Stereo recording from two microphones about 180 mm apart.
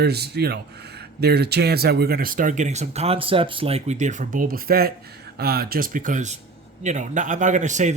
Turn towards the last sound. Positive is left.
turn(degrees=-40)  # may be behind; listen again after turning